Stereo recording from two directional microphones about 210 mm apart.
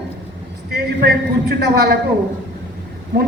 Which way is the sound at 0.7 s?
50° right (ahead or behind).